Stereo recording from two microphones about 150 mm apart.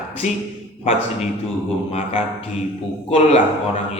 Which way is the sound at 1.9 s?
45° left (ahead or behind).